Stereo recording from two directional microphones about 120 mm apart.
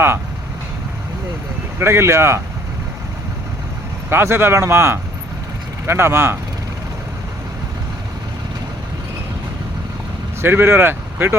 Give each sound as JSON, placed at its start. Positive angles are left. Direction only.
{"t": 1.8, "sound": "speech", "side_deg": -20}
{"t": 4.1, "sound": "speech", "side_deg": -20}
{"t": 10.4, "sound": "speech", "side_deg": -20}